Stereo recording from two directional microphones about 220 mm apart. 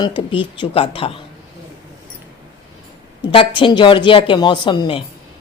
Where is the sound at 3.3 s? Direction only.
25° left (ahead or behind).